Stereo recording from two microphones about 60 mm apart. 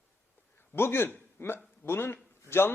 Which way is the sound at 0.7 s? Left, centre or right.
Left.